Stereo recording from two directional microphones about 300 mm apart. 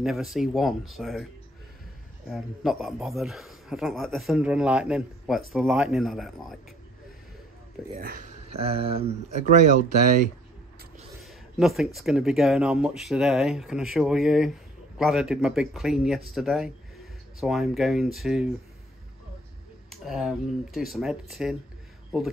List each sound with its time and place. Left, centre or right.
0.0 s speech: centre
2.2 s speech: centre
7.9 s speech: right
11.2 s speech: centre
19.9 s speech: centre